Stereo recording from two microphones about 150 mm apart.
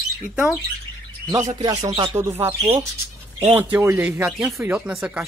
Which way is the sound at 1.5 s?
30° right (ahead or behind).